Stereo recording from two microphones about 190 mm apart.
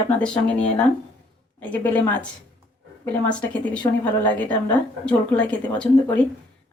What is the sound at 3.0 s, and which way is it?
Speech, 10° left (ahead or behind).